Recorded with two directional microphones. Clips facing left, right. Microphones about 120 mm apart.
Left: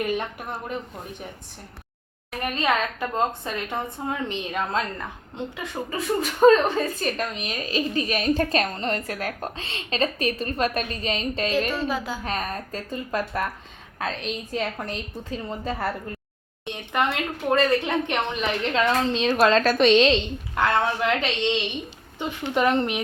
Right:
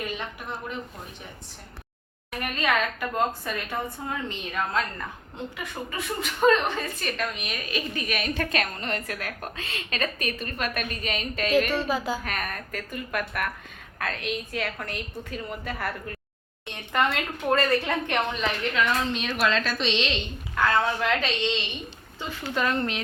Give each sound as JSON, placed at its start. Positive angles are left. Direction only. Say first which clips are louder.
{"t": 2.4, "sound": "a woman's voice", "louder": "left 2 dB", "side_deg": 30}
{"t": 5.5, "sound": "a woman's voice", "louder": "left 4 dB", "side_deg": 35}
{"t": 11.9, "sound": "a woman's voice", "louder": "right 1 dB", "side_deg": -5}
{"t": 12.2, "sound": "a woman's voice", "louder": "left 4 dB", "side_deg": 30}
{"t": 18.6, "sound": "a woman's voice", "louder": "left 4 dB", "side_deg": 30}
{"t": 19.7, "sound": "a woman's voice", "louder": "left 10 dB", "side_deg": 50}
{"t": 20.6, "sound": "a woman's voice", "louder": "left 1 dB", "side_deg": 20}